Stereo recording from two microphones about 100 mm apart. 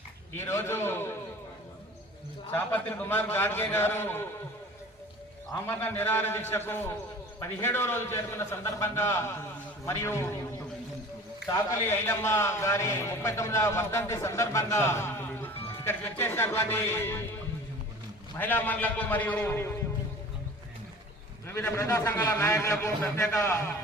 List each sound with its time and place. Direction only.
0.3 s a man's voice: 25° left (ahead or behind)
2.5 s a man's voice: 20° left (ahead or behind)
5.5 s a man's voice: 20° left (ahead or behind)
11.5 s a man's voice: 25° left (ahead or behind)
18.3 s a man's voice: 20° left (ahead or behind)
21.8 s a man's voice: 25° left (ahead or behind)